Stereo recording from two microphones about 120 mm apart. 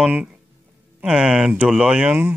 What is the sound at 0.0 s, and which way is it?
Speech, 10° right (ahead or behind).